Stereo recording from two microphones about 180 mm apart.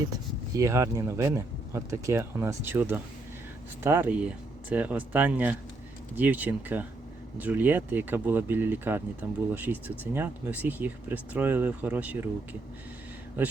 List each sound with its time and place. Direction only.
0.1 s speech: 15° right (ahead or behind)
13.4 s speech: 10° right (ahead or behind)